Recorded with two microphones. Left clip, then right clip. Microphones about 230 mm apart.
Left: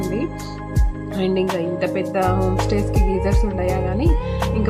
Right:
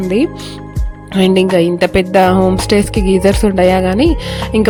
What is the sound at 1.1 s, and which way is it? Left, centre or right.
Music, right.